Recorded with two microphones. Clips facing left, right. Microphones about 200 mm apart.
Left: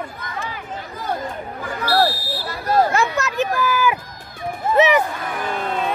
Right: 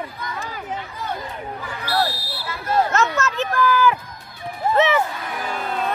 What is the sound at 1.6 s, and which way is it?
Buzzer, 40° left (ahead or behind).